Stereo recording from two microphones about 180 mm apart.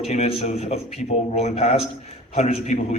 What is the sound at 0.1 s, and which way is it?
A man's voice, 35° left (ahead or behind).